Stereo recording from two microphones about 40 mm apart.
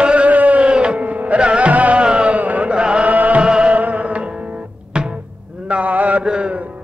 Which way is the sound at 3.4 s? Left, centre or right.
Right.